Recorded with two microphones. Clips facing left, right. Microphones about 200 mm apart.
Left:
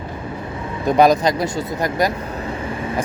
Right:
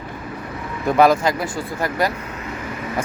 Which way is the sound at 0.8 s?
20° left (ahead or behind).